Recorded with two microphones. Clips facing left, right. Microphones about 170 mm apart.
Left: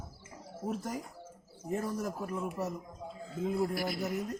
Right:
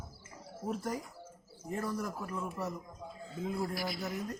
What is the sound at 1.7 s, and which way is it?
Speech, 15° left (ahead or behind).